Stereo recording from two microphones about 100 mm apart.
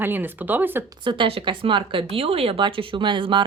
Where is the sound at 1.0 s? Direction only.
60° right (ahead or behind).